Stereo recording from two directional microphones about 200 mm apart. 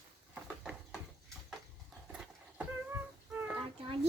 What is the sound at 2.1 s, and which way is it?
Vehicle, 5° right (ahead or behind).